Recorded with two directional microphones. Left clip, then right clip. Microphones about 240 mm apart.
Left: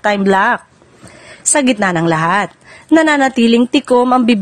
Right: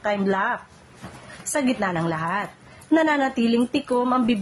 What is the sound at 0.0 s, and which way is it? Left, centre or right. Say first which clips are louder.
A woman's voice: left 11 dB; left.